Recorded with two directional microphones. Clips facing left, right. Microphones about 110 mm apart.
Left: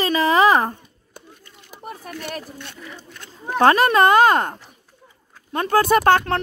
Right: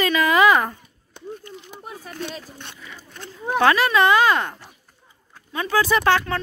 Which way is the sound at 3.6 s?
45° left (ahead or behind).